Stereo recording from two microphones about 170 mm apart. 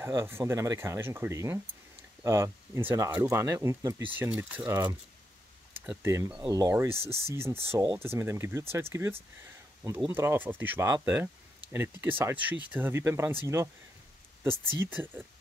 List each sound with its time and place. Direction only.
0.0 s speech: 15° right (ahead or behind)
5.9 s speech: 15° right (ahead or behind)
14.8 s speech: 10° right (ahead or behind)